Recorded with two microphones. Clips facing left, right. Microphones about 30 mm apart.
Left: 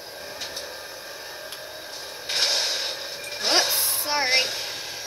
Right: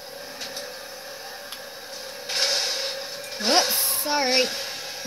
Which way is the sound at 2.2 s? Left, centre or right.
Left.